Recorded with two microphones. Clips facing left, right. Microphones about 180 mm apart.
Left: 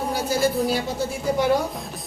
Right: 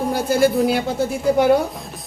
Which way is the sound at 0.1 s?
55° right (ahead or behind).